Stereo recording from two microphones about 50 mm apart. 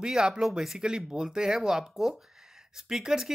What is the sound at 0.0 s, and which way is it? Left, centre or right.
Speech, centre.